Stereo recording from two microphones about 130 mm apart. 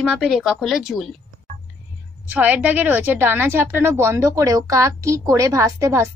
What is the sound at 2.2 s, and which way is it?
A woman's voice, 10° right (ahead or behind).